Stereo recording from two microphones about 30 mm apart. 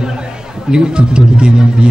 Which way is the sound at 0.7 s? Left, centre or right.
Right.